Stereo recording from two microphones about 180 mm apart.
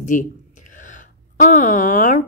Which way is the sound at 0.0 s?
45° left (ahead or behind).